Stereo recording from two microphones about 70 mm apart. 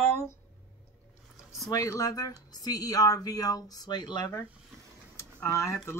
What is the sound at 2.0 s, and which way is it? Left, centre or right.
Speech, left.